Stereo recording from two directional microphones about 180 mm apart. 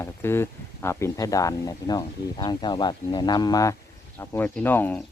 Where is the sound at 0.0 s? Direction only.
15° left (ahead or behind).